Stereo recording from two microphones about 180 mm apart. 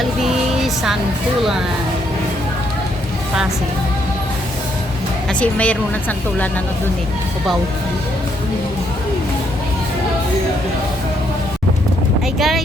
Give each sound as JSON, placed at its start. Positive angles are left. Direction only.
{"t": 0.2, "sound": "a sound", "side_deg": 0}
{"t": 5.3, "sound": "a woman's voice", "side_deg": 5}
{"t": 12.4, "sound": "speech", "side_deg": 0}